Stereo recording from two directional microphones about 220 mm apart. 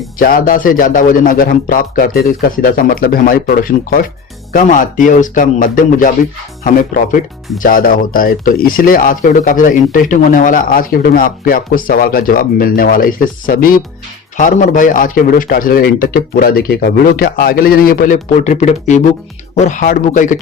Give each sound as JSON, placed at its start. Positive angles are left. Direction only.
{"t": 0.2, "sound": "speech", "side_deg": 40}